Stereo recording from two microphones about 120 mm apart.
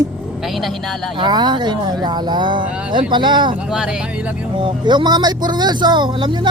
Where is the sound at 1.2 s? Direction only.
35° right (ahead or behind).